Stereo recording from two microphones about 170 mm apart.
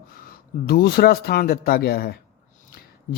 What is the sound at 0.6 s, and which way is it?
Speech, 65° left (ahead or behind).